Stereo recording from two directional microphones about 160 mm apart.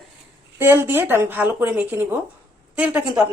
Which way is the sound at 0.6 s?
15° right (ahead or behind).